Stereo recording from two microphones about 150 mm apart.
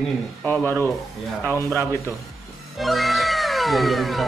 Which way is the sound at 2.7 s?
Centre (ahead or behind).